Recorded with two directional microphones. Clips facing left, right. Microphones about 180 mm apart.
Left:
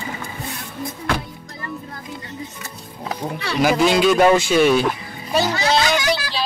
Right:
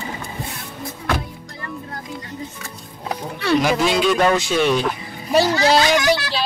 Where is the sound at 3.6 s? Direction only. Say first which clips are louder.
Left 6 dB; centre (ahead or behind).